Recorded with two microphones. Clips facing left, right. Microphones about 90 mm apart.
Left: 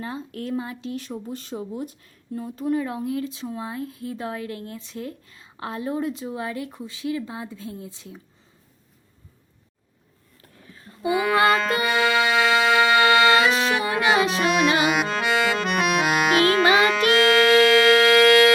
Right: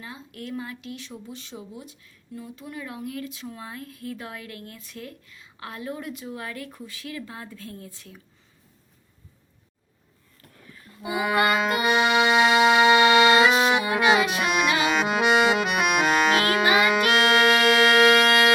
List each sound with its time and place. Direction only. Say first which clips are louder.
0.0 s speech: left 7 dB; 40° left (ahead or behind)
0.9 s speech: left 7 dB; 40° left (ahead or behind); by 8.2 s 20° left (ahead or behind)
11.1 s music: left 3 dB; 15° right (ahead or behind)
14.4 s music: left 4 dB; 5° right (ahead or behind)
15.0 s accordion: right 2 dB; 15° right (ahead or behind)
15.6 s accordion: left 1 dB; 5° right (ahead or behind)
16.9 s music: left 2 dB; 15° right (ahead or behind)